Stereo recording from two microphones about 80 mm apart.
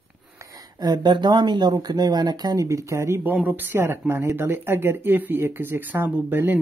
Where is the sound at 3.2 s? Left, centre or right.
Right.